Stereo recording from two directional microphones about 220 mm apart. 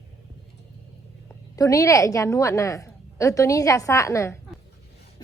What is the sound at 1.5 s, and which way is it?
A woman's voice, 15° left (ahead or behind).